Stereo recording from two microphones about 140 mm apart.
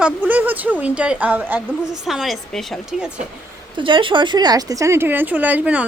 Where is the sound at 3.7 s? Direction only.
35° right (ahead or behind).